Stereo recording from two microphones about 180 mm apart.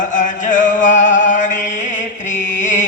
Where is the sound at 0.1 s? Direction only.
45° left (ahead or behind).